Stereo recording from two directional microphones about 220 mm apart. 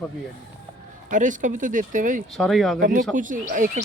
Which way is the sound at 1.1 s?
35° right (ahead or behind).